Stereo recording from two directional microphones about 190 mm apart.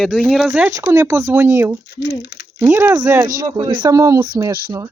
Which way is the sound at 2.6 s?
10° right (ahead or behind).